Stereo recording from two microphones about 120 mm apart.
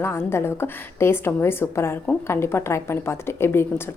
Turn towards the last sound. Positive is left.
turn(degrees=20)  # may be behind; listen again after turning